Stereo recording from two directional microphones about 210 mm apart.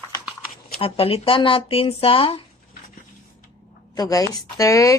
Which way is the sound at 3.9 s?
15° left (ahead or behind).